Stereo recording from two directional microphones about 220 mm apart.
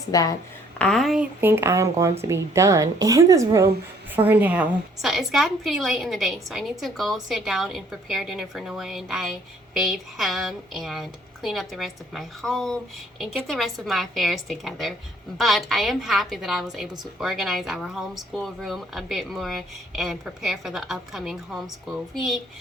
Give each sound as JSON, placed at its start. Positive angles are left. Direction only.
{"t": 0.1, "sound": "a woman's voice", "side_deg": 15}
{"t": 0.8, "sound": "a woman's voice", "side_deg": 5}